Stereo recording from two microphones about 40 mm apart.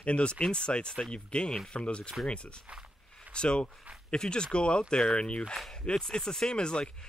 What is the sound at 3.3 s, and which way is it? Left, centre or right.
Speech, left.